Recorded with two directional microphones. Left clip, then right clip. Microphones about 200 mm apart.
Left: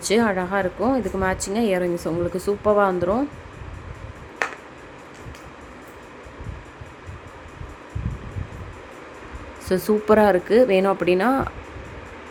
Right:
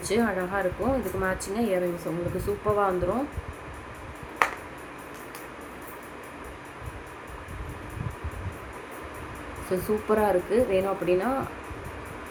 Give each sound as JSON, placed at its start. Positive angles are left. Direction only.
{"t": 0.0, "sound": "speech", "side_deg": 50}
{"t": 4.4, "sound": "a sound", "side_deg": 5}
{"t": 9.6, "sound": "speech", "side_deg": 50}